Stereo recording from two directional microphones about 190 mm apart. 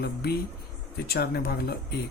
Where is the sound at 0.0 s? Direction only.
60° left (ahead or behind).